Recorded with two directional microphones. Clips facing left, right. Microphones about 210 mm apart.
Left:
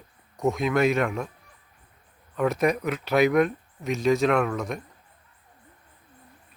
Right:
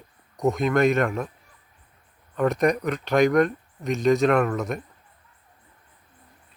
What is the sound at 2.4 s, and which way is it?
Speech, centre (ahead or behind).